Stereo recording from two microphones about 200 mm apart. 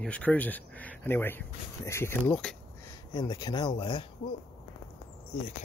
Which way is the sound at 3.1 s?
20° left (ahead or behind).